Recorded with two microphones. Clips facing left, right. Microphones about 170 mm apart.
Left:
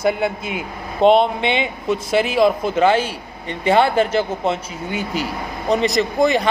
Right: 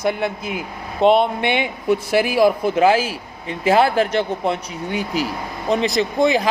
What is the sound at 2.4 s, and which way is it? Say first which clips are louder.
Speech: right 1 dB; 25° left (ahead or behind).